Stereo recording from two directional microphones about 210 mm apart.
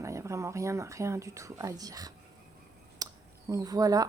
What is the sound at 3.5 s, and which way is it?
Speech, 15° right (ahead or behind).